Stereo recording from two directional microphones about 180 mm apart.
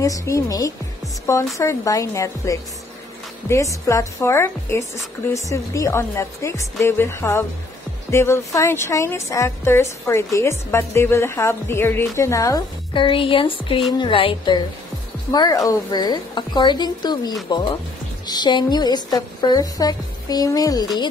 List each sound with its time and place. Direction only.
0.0 s a woman's voice: 15° left (ahead or behind)